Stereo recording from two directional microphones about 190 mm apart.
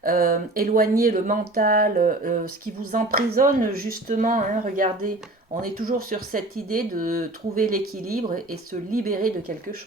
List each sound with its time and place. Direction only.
0.0 s speech: 50° right (ahead or behind)